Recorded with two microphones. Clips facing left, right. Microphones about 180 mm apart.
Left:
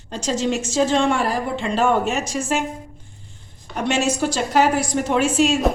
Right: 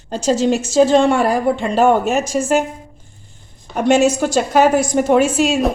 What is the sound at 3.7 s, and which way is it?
A woman's voice, 50° right (ahead or behind).